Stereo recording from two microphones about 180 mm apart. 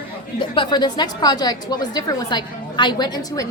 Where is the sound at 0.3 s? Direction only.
25° left (ahead or behind).